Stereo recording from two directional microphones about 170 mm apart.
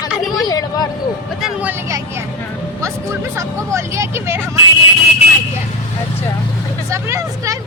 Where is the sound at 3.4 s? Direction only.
15° right (ahead or behind).